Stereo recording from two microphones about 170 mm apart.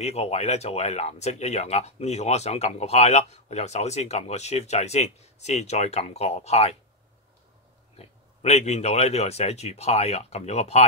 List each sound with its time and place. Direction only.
0.0 s speech: 40° left (ahead or behind)
8.0 s speech: 40° left (ahead or behind)